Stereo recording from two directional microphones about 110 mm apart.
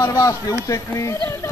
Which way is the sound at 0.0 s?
30° left (ahead or behind).